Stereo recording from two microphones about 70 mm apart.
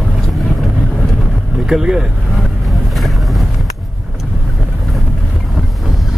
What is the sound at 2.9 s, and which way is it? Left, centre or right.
Boat, centre.